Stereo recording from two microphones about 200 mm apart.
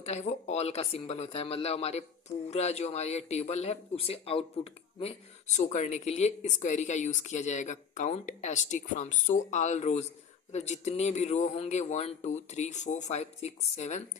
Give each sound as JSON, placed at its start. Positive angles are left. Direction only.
{"t": 0.0, "sound": "speech", "side_deg": 35}